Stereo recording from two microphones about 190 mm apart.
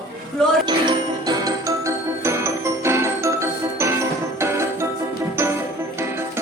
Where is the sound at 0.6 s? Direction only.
20° right (ahead or behind).